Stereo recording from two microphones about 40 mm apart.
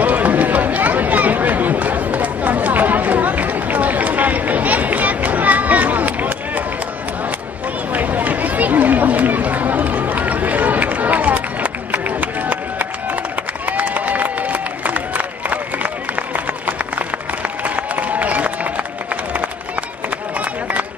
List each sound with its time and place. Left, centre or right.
0.0 s run: right
7.9 s chatter: right
13.7 s a sound: right